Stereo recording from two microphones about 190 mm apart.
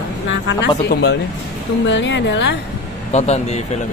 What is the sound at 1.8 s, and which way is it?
Speech, 70° left (ahead or behind).